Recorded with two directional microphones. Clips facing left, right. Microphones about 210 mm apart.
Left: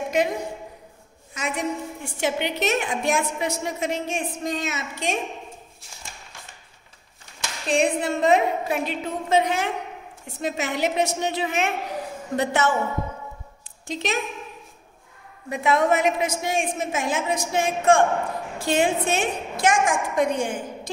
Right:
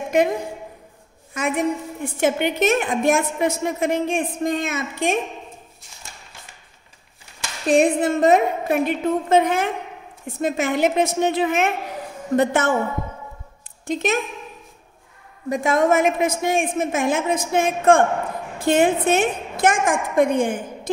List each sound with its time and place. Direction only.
0.1 s a woman's voice: 55° right (ahead or behind)
1.3 s a woman's voice: 55° right (ahead or behind)
7.6 s a woman's voice: 50° right (ahead or behind)
13.8 s a woman's voice: 50° right (ahead or behind)
15.5 s a woman's voice: 45° right (ahead or behind)